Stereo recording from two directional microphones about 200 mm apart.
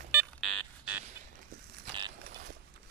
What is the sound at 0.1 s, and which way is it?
Alarm, 10° right (ahead or behind).